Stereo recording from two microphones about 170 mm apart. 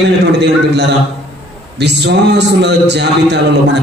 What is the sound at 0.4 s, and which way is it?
A man's voice, 90° right.